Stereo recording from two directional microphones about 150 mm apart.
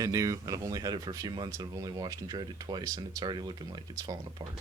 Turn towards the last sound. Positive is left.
turn(degrees=-25)  # may be behind; listen again after turning